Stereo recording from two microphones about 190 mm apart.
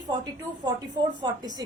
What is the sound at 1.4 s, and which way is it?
Speech, 20° right (ahead or behind).